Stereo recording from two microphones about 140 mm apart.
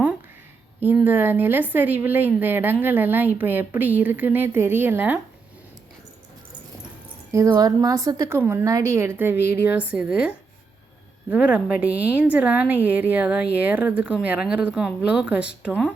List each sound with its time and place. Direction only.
0.8 s a woman's voice: 15° right (ahead or behind)
7.3 s a woman's voice: 20° right (ahead or behind)